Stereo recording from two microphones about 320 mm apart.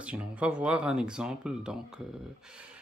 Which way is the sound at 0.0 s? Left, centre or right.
Centre.